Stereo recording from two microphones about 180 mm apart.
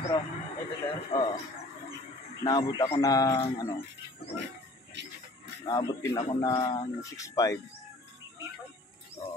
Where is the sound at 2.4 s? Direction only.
25° left (ahead or behind).